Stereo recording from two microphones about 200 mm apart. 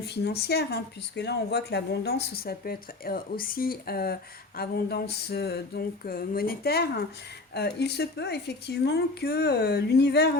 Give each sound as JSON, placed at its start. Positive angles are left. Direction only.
{"t": 0.0, "sound": "speech", "side_deg": 55}